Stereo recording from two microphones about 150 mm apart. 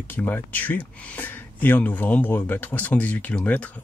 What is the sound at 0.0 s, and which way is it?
Speech, 15° left (ahead or behind).